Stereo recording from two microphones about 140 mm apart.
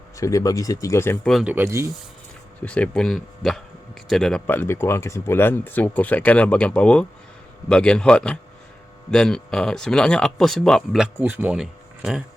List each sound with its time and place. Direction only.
0.2 s speech: 25° left (ahead or behind)
1.3 s speech: centre (ahead or behind)
1.5 s speech: 20° right (ahead or behind)
2.6 s speech: 10° left (ahead or behind)